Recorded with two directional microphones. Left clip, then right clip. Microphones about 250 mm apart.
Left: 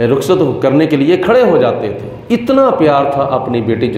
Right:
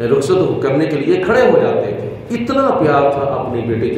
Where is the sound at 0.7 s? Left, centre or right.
Left.